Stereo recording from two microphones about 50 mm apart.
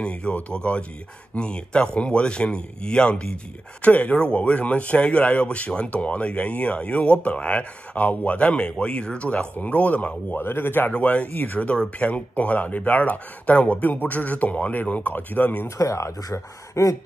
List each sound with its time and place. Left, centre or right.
0.0 s speech: left
10.3 s a man's voice: left
10.9 s speech: left
11.3 s speech: left
11.6 s speech: left
15.8 s speech: left
16.8 s speech: left